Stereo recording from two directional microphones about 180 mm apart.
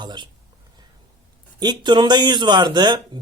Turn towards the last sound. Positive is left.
turn(degrees=-25)  # may be behind; listen again after turning